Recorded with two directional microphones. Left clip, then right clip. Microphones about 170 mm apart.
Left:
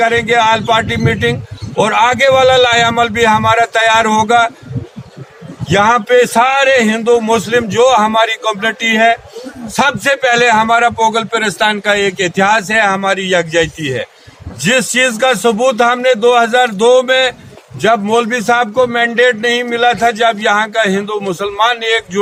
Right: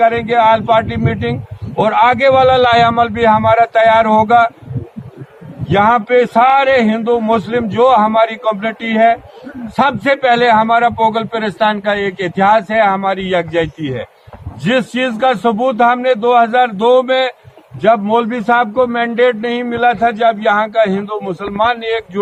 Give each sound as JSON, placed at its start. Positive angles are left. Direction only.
{"t": 0.0, "sound": "a man's voice", "side_deg": 40}
{"t": 5.6, "sound": "a man's voice", "side_deg": 40}